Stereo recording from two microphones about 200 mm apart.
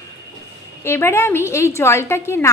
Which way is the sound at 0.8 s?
10° left (ahead or behind).